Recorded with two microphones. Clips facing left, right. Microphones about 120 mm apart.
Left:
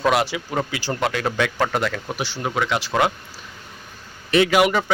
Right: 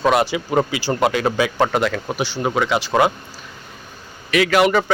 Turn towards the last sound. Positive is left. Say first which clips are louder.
# right 1 dB
turn(degrees=15)  # may be behind; listen again after turning